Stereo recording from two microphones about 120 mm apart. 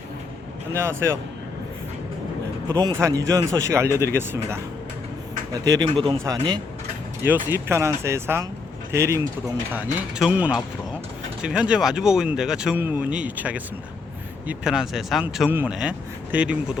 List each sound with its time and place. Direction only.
0.7 s speech: 20° right (ahead or behind)
2.6 s speech: 30° right (ahead or behind)
5.5 s speech: 30° right (ahead or behind)
7.2 s speech: 15° right (ahead or behind)
9.7 s speech: 10° right (ahead or behind)
15.4 s speech: 15° right (ahead or behind)